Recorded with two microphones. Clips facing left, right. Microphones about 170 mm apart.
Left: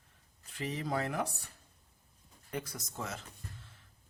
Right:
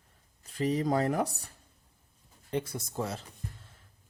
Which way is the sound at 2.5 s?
25° right (ahead or behind).